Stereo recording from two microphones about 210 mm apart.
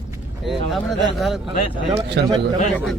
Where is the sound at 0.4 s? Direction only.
Centre (ahead or behind).